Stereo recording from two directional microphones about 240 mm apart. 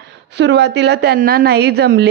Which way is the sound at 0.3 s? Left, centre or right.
Right.